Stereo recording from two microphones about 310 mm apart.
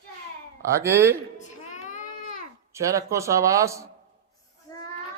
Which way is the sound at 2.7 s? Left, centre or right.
Centre.